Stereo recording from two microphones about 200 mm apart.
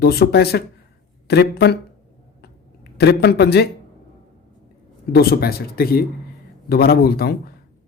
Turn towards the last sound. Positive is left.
turn(degrees=50)  # may be behind; listen again after turning